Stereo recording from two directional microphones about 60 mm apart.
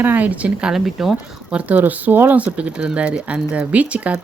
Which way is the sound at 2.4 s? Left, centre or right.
Right.